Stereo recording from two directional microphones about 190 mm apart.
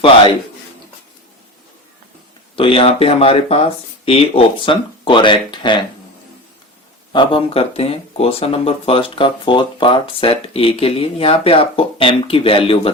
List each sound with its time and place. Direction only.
2.6 s speech: 30° left (ahead or behind)
7.1 s speech: 25° left (ahead or behind)